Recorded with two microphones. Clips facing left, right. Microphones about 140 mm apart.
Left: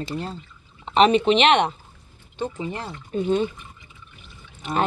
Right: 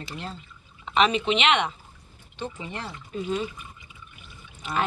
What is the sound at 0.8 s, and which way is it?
Speech, 35° left (ahead or behind).